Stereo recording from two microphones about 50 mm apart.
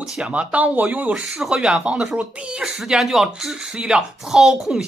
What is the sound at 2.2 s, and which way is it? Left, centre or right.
Speech, right.